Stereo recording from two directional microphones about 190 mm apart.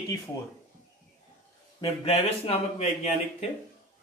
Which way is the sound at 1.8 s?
30° left (ahead or behind).